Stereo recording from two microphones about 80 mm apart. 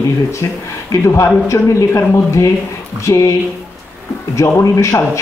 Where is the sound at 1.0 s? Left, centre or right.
Left.